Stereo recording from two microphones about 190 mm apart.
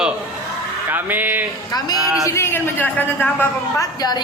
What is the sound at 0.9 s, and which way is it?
Speech, 10° right (ahead or behind).